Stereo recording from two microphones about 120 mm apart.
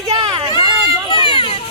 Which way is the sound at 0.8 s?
40° left (ahead or behind).